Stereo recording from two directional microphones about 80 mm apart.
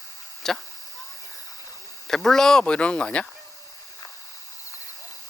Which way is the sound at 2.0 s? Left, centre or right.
Centre.